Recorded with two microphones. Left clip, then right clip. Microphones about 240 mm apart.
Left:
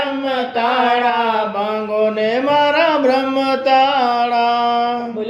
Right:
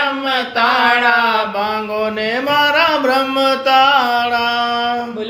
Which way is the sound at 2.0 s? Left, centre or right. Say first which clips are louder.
Left 5 dB; right.